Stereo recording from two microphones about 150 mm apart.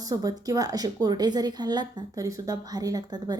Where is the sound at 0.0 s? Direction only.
25° right (ahead or behind).